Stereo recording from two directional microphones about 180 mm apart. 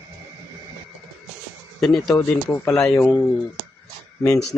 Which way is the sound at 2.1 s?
15° left (ahead or behind).